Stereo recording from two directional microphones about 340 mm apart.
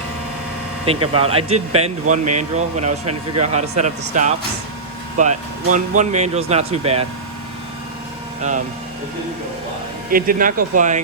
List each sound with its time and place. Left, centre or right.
1.0 s speech: centre
8.4 s speech: right
10.1 s speech: right